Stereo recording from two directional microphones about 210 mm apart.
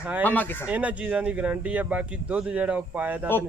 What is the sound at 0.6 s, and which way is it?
Speech, 5° right (ahead or behind).